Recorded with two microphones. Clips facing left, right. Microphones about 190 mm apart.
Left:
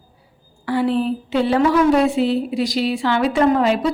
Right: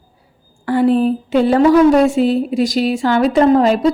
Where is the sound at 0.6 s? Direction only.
50° right (ahead or behind).